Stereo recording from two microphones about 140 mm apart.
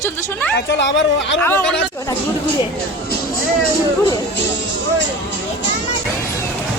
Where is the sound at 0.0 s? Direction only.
15° left (ahead or behind).